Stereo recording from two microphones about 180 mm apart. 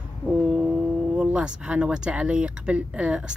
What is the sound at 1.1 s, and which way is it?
Speech, 5° right (ahead or behind).